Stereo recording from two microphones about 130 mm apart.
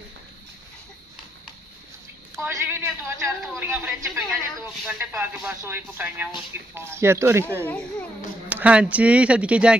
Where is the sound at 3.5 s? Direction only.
20° right (ahead or behind).